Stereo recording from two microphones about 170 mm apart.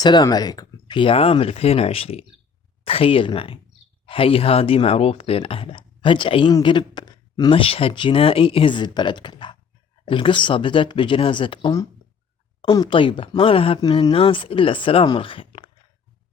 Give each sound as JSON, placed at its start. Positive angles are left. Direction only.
{"t": 0.0, "sound": "speech", "side_deg": 25}